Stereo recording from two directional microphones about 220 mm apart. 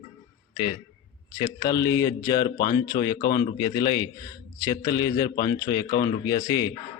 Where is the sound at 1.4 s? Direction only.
15° left (ahead or behind).